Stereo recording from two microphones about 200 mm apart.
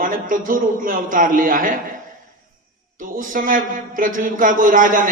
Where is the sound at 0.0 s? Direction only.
45° right (ahead or behind).